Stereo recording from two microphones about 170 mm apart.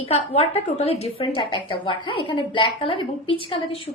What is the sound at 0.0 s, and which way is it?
A woman's voice, 35° left (ahead or behind).